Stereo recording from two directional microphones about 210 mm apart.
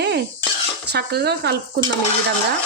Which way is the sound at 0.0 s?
55° right (ahead or behind).